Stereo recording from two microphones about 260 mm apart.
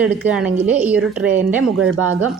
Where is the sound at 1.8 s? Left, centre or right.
Right.